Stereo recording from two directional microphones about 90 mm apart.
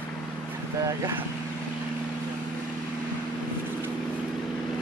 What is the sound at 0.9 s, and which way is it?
Speech, 35° right (ahead or behind).